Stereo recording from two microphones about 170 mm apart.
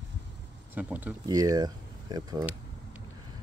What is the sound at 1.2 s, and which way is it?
Speech, 20° right (ahead or behind).